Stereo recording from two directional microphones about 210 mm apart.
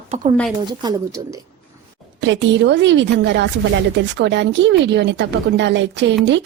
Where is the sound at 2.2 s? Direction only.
60° right (ahead or behind).